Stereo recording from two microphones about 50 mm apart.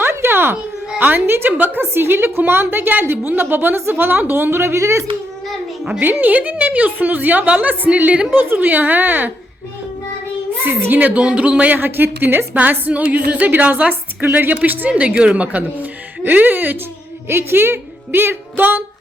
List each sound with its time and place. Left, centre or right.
0.0 s a sound: right
0.9 s a woman's voice: right
1.5 s a woman's voice: right
1.8 s a woman's voice: right
6.0 s a woman's voice: right
8.3 s a woman's voice: right
10.7 s a woman's voice: right
11.0 s speech: right
11.8 s a woman's voice: right
12.9 s a woman's voice: right
17.2 s a woman's voice: right